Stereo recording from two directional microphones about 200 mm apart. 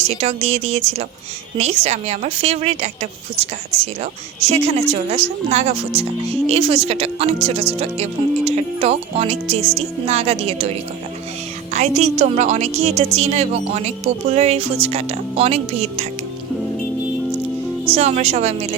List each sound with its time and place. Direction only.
0.1 s speech: 30° right (ahead or behind)
11.7 s speech: 35° right (ahead or behind)
17.9 s speech: 30° right (ahead or behind)